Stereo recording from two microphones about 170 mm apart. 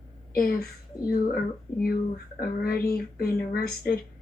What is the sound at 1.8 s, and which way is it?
Speech, 60° left (ahead or behind).